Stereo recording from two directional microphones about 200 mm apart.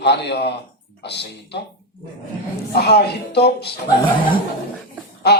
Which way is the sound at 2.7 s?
55° left (ahead or behind).